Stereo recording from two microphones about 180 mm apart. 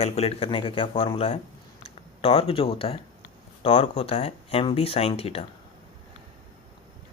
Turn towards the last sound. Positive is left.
turn(degrees=35)  # may be behind; listen again after turning